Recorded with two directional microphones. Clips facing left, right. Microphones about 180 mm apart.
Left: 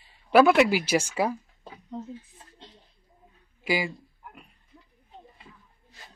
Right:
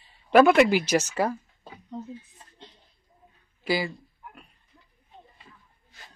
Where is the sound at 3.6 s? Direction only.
10° left (ahead or behind).